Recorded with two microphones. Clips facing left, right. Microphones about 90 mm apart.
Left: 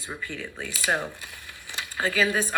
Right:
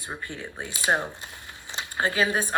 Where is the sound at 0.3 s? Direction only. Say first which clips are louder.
Left 1 dB; 20° right (ahead or behind).